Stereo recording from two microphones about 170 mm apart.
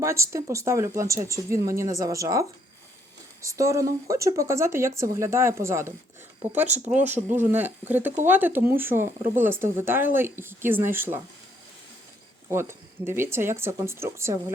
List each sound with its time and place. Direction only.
0.0 s speech: 15° right (ahead or behind)
12.5 s speech: 15° right (ahead or behind)